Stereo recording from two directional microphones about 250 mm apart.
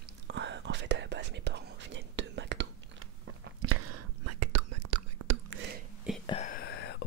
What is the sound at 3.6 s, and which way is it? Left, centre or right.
Whispering, right.